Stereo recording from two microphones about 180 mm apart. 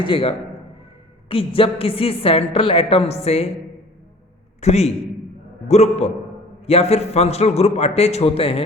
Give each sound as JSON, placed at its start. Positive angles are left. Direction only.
{"t": 0.0, "sound": "a woman's voice", "side_deg": 30}
{"t": 4.6, "sound": "a woman's voice", "side_deg": 40}